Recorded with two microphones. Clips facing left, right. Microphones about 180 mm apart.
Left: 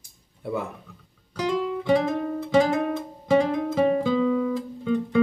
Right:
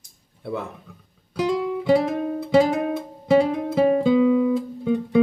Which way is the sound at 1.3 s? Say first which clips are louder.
Right 3 dB; 15° right (ahead or behind).